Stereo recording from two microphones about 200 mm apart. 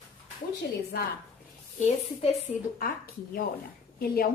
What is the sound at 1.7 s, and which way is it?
Speech, 35° left (ahead or behind).